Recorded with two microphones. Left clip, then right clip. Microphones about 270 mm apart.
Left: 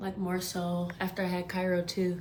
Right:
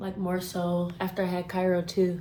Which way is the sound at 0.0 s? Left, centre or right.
Centre.